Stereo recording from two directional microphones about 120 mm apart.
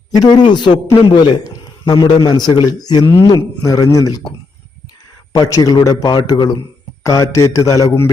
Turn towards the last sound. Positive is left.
turn(degrees=30)  # may be behind; listen again after turning